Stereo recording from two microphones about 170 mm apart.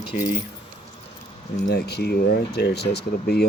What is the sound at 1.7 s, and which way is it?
Speech, 75° left (ahead or behind).